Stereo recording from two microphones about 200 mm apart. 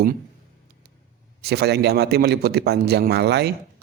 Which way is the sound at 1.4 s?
55° right (ahead or behind).